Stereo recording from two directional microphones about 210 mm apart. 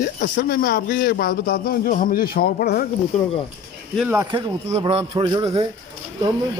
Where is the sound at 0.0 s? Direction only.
40° left (ahead or behind).